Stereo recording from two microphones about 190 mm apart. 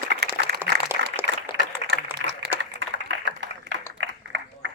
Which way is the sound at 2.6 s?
75° right (ahead or behind).